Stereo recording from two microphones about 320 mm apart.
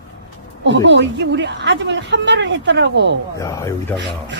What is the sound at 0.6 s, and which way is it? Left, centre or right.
A woman's voice, right.